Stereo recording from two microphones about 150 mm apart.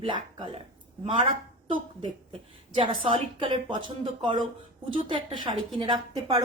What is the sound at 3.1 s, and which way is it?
A woman's voice, 35° right (ahead or behind).